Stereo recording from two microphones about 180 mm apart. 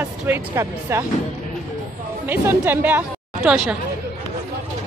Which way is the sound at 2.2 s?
10° right (ahead or behind).